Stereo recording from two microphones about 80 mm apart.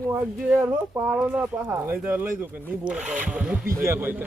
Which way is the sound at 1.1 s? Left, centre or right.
Centre.